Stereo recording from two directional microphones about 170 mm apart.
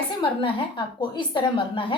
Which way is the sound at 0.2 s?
30° left (ahead or behind).